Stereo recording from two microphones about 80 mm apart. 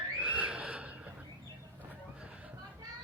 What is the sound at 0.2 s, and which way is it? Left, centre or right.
Neigh, centre.